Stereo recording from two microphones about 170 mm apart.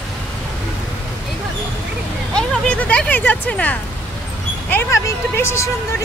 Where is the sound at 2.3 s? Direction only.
5° left (ahead or behind).